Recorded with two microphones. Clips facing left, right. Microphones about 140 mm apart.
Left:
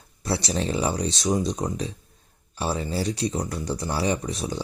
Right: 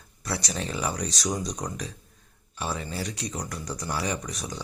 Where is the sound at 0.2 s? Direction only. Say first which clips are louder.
Left 6 dB; 30° left (ahead or behind).